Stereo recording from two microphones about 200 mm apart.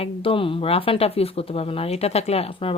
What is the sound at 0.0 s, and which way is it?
Speech, 25° left (ahead or behind).